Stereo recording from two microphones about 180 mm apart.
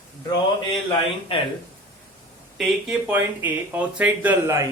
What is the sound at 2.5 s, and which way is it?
Speech, 5° right (ahead or behind).